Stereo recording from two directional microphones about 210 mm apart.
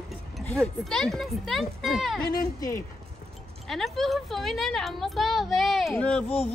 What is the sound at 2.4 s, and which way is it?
Speech, 15° left (ahead or behind).